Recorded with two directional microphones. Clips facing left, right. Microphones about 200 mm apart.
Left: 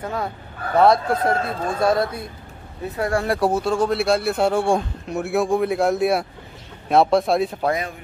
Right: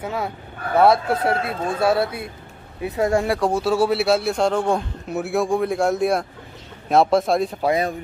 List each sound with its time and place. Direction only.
0.0 s speech: 5° right (ahead or behind)
2.8 s speech: 20° right (ahead or behind)
3.3 s speech: 5° left (ahead or behind)